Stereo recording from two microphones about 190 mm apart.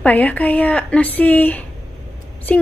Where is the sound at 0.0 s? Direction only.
10° left (ahead or behind).